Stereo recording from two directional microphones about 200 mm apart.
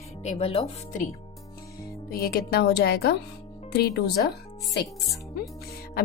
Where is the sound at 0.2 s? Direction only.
35° left (ahead or behind).